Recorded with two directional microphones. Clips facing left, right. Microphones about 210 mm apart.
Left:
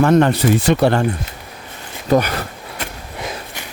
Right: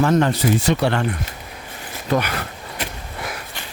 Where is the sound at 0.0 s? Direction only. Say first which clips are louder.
Left 4 dB; 65° left (ahead or behind).